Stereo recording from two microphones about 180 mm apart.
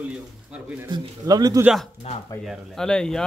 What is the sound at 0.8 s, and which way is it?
Speech, 20° right (ahead or behind).